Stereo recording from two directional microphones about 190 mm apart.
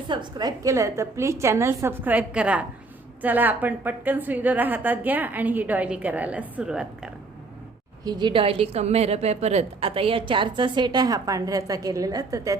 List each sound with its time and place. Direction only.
0.1 s a woman's voice: 25° right (ahead or behind); by 7.1 s 5° right (ahead or behind)
8.0 s a woman's voice: 25° right (ahead or behind)